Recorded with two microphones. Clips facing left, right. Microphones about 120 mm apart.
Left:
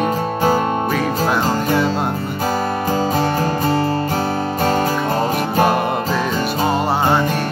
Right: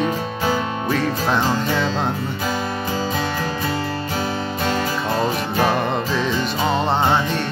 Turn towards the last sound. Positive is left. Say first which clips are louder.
# left 2 dB
turn(degrees=10)  # may be behind; listen again after turning